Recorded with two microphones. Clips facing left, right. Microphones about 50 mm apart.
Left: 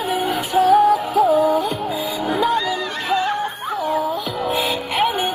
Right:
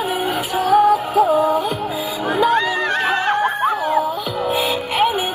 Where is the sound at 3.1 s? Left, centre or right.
Right.